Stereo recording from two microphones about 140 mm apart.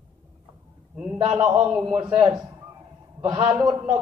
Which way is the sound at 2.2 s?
25° right (ahead or behind).